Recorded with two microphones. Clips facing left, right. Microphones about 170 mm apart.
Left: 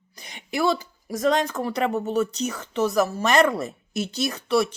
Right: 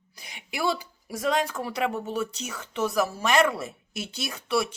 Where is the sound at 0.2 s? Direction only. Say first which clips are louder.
Left 6 dB; 5° right (ahead or behind).